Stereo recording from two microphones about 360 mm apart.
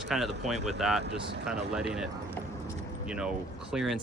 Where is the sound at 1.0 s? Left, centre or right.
Right.